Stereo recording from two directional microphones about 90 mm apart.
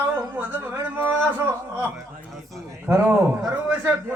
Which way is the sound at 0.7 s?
25° right (ahead or behind).